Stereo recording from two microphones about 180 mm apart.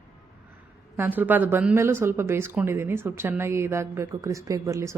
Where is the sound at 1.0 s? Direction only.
10° right (ahead or behind).